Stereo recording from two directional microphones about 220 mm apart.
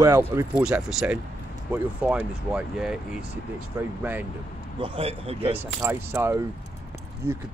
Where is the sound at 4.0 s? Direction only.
10° right (ahead or behind).